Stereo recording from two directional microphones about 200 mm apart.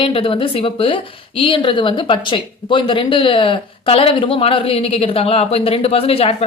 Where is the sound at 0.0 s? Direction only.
25° left (ahead or behind).